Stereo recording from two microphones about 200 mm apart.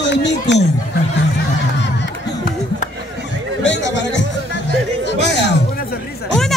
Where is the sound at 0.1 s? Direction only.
60° left (ahead or behind).